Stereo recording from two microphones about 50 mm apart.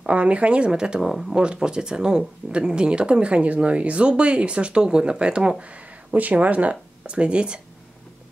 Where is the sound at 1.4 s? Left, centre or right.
Centre.